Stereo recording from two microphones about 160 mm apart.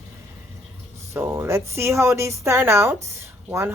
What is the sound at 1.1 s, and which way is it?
A woman's voice, 15° right (ahead or behind).